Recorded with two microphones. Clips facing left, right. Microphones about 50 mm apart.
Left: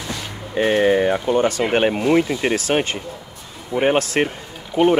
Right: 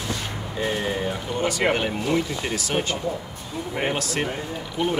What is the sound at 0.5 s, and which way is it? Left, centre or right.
Speech, left.